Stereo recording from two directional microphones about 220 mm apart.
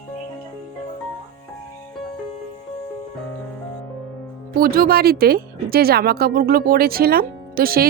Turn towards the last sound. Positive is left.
turn(degrees=-40)  # may be behind; listen again after turning